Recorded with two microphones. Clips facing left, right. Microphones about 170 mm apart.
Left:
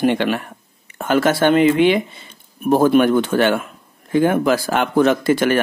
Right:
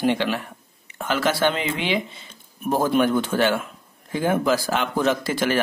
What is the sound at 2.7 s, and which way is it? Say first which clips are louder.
Speech: left 6 dB; 65° left (ahead or behind).